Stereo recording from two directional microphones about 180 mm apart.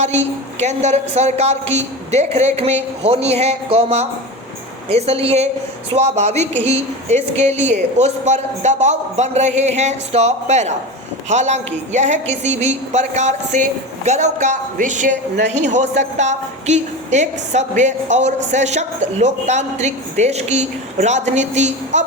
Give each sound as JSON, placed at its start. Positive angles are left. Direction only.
{"t": 0.6, "sound": "a woman's voice", "side_deg": -40}